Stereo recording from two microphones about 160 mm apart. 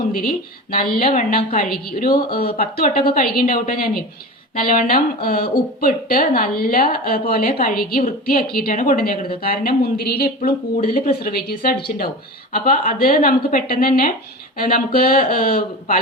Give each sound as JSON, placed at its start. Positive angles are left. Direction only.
{"t": 0.7, "sound": "a woman's voice", "side_deg": 70}